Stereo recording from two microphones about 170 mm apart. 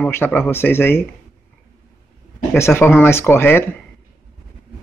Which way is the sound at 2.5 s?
15° left (ahead or behind).